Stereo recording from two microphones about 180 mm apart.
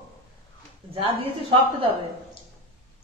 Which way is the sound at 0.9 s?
30° right (ahead or behind).